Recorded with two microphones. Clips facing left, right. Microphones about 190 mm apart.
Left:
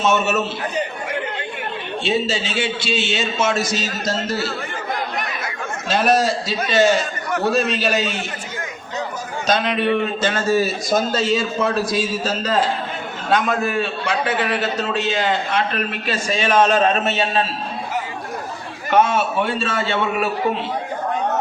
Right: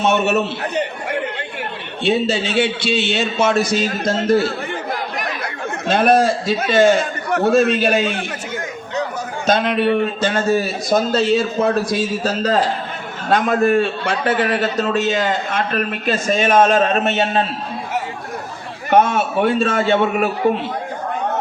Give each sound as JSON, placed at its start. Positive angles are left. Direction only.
{"t": 0.0, "sound": "a man's voice", "side_deg": -60}
{"t": 2.0, "sound": "a man's voice", "side_deg": -60}
{"t": 5.9, "sound": "a man's voice", "side_deg": -55}
{"t": 9.5, "sound": "a man's voice", "side_deg": -55}
{"t": 13.3, "sound": "a man's voice", "side_deg": -50}
{"t": 18.9, "sound": "a man's voice", "side_deg": -55}